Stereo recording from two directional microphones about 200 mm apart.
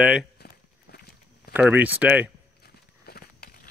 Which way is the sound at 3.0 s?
50° left (ahead or behind).